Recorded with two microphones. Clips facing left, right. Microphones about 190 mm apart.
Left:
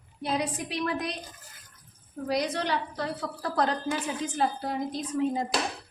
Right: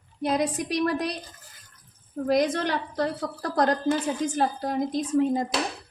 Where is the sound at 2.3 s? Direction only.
50° right (ahead or behind).